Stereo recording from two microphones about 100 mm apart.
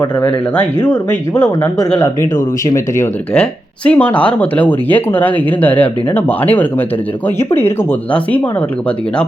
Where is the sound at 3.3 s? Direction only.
10° left (ahead or behind).